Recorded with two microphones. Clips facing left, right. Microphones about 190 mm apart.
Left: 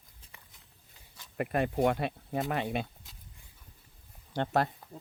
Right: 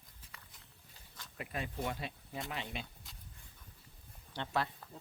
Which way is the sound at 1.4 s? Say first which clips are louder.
Left 12 dB; 60° left (ahead or behind).